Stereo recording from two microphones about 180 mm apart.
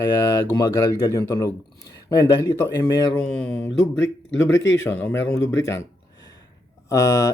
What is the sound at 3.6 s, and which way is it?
Speech, 90° left.